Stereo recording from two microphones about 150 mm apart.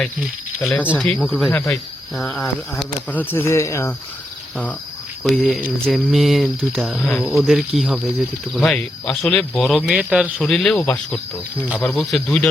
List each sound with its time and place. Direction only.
0.2 s speech: 5° right (ahead or behind)
2.7 s speech: 10° left (ahead or behind)
5.2 s speech: centre (ahead or behind)
11.5 s speech: 10° right (ahead or behind)
11.8 s speech: 5° left (ahead or behind)